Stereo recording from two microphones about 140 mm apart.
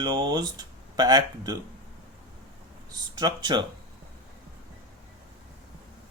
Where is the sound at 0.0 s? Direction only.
30° right (ahead or behind).